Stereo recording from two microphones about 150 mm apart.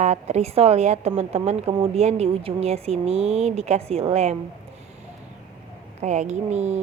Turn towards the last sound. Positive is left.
turn(degrees=-45)  # may be behind; listen again after turning